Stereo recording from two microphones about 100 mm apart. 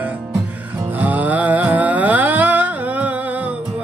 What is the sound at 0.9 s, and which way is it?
Music, 15° right (ahead or behind).